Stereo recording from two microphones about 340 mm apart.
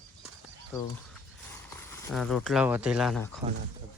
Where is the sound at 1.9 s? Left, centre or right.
Centre.